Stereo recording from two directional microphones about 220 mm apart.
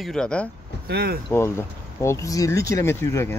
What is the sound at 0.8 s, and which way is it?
Speech, 45° right (ahead or behind).